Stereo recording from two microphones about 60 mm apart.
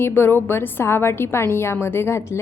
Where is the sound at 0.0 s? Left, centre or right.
Left.